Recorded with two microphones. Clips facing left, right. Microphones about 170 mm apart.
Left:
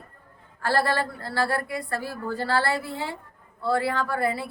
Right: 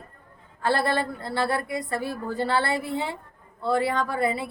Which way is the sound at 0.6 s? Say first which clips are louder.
Even; 20° right (ahead or behind).